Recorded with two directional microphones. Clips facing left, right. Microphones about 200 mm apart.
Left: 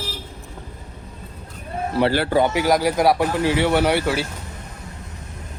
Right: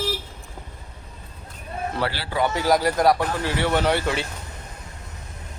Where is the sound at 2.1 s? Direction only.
50° left (ahead or behind).